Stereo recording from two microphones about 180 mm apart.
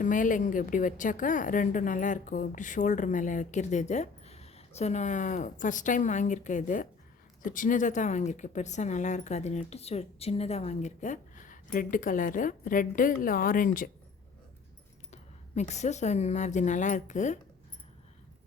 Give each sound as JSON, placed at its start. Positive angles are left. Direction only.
{"t": 0.0, "sound": "a woman's voice", "side_deg": 45}
{"t": 15.1, "sound": "speech", "side_deg": 40}